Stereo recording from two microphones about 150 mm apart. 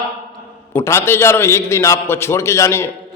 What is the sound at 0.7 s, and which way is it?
A man's voice, 15° left (ahead or behind).